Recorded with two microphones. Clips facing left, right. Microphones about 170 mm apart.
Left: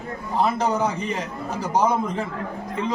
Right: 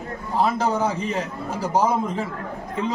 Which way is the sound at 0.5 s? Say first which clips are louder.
Even; 30° right (ahead or behind).